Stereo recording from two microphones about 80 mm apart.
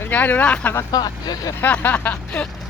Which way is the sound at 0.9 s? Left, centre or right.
Left.